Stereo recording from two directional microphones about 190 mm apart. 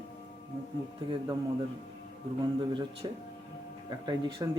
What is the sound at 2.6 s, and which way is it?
Speech, 25° right (ahead or behind).